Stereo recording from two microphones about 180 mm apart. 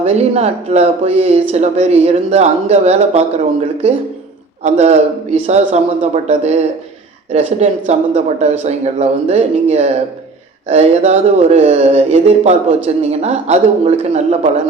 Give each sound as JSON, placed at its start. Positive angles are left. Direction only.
{"t": 0.0, "sound": "speech", "side_deg": -35}
{"t": 4.6, "sound": "speech", "side_deg": -40}